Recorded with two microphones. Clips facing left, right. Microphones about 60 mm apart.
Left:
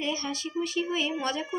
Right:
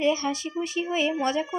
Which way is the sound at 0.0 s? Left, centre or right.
Right.